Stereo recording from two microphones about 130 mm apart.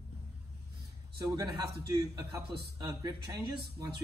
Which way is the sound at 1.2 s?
30° right (ahead or behind).